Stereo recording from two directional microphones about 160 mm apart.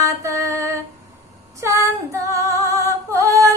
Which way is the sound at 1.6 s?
15° right (ahead or behind).